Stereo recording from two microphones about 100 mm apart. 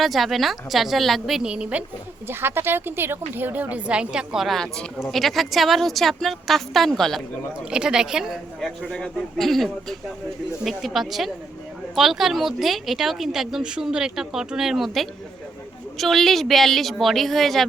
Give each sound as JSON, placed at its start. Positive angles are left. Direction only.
{"t": 0.0, "sound": "speech", "side_deg": 0}
{"t": 2.2, "sound": "speech", "side_deg": -25}
{"t": 7.7, "sound": "speech", "side_deg": -10}